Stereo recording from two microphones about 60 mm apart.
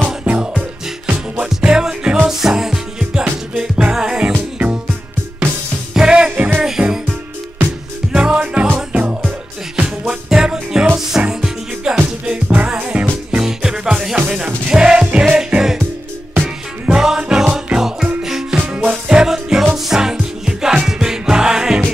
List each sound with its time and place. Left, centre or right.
0.2 s music: right
1.4 s music: centre
5.9 s music: centre
6.3 s music: right
6.6 s music: centre
8.1 s music: centre
9.8 s music: centre